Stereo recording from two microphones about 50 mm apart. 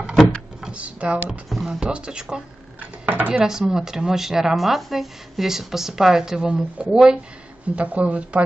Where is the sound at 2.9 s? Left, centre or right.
Right.